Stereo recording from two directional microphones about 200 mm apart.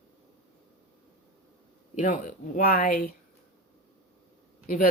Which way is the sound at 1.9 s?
40° left (ahead or behind).